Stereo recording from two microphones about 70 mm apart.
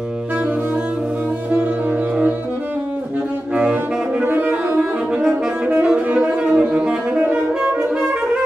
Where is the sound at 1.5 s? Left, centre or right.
Centre.